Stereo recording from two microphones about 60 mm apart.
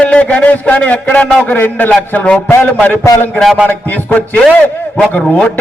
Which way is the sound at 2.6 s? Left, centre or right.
Centre.